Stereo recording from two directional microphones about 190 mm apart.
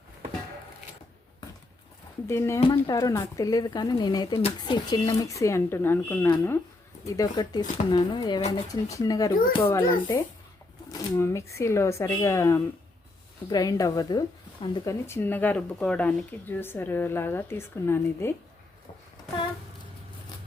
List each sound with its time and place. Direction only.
2.2 s speech: 15° left (ahead or behind)
2.6 s speech: 25° left (ahead or behind)
8.4 s speech: 35° left (ahead or behind)
8.7 s speech: 20° left (ahead or behind)